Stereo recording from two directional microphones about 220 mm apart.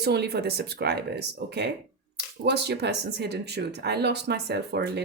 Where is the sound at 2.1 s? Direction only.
50° right (ahead or behind).